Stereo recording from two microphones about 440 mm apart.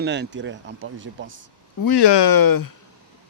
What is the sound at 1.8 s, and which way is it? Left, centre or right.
Speech, left.